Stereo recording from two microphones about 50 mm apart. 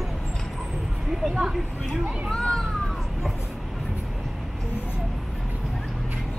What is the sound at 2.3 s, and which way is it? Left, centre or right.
Speech, centre.